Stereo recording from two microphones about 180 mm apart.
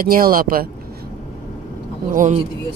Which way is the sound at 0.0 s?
55° right (ahead or behind).